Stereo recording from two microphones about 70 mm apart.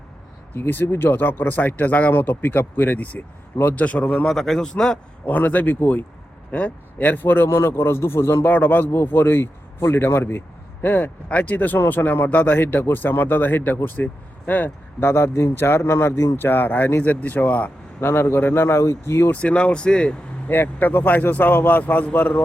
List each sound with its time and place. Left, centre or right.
0.5 s speech: left
4.3 s speech: centre
5.2 s a man's voice: left
8.4 s a man's voice: left
15.0 s a man's voice: left
18.0 s a man's voice: left
19.3 s speech: centre
20.5 s speech: left